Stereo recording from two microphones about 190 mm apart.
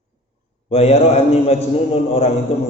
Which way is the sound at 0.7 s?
35° left (ahead or behind).